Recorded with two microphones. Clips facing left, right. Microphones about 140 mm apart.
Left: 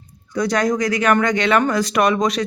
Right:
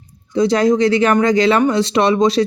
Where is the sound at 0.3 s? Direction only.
25° right (ahead or behind).